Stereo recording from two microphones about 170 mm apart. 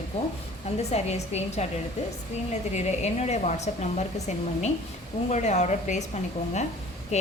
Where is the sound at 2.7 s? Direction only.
40° left (ahead or behind).